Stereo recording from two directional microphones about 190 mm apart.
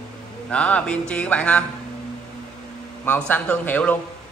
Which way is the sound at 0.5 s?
5° left (ahead or behind).